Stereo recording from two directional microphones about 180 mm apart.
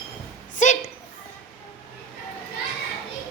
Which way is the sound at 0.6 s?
45° left (ahead or behind).